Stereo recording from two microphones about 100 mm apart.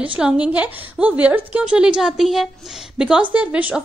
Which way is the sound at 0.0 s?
15° right (ahead or behind).